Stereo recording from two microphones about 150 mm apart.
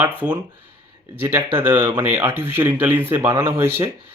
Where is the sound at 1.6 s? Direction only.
15° right (ahead or behind).